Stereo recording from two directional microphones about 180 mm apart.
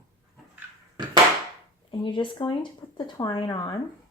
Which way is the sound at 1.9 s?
25° left (ahead or behind).